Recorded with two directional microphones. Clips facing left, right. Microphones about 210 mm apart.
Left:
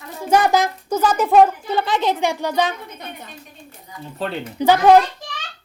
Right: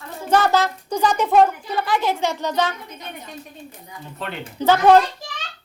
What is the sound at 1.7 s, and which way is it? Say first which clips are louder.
Speech: left 2 dB; 25° left (ahead or behind).